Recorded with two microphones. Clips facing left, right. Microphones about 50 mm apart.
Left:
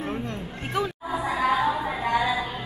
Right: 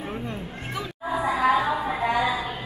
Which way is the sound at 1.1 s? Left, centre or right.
Centre.